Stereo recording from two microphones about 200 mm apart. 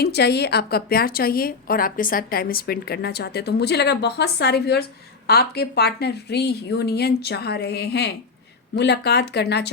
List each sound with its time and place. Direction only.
0.0 s a woman's voice: 55° left (ahead or behind)